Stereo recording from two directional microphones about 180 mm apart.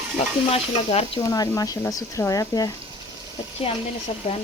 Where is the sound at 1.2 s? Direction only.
20° left (ahead or behind).